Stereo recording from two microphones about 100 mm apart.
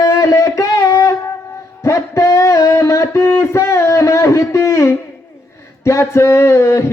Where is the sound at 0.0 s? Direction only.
35° left (ahead or behind).